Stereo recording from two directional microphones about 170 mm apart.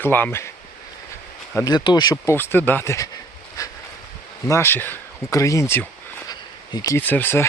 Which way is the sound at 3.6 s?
20° left (ahead or behind).